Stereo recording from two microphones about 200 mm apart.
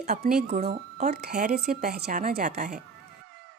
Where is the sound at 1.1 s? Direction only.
50° right (ahead or behind).